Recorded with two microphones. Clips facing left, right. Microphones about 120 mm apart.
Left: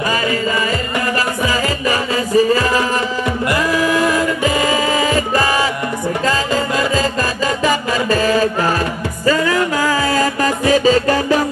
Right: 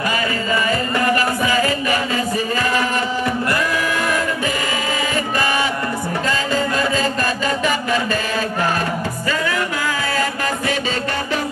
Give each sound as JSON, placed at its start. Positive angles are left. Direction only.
{"t": 1.5, "sound": "music", "side_deg": 35}
{"t": 5.4, "sound": "music", "side_deg": 35}
{"t": 7.6, "sound": "chant", "side_deg": 40}
{"t": 9.2, "sound": "music", "side_deg": 40}